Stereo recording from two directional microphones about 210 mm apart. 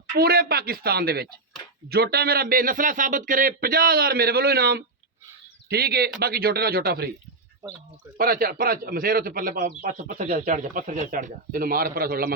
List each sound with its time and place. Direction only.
0.2 s a man's voice: 50° right (ahead or behind)
8.2 s a man's voice: 45° right (ahead or behind)